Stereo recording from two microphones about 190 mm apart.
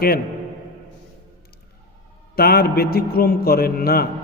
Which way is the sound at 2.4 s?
55° left (ahead or behind).